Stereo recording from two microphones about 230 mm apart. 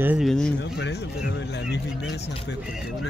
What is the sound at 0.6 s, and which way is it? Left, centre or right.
Speech, left.